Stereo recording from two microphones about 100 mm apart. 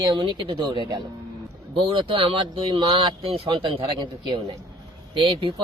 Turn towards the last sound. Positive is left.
turn(degrees=-55)  # may be behind; listen again after turning